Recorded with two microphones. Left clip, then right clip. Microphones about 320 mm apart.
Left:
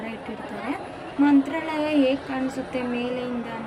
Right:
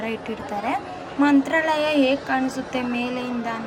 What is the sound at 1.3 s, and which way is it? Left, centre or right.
Speech, centre.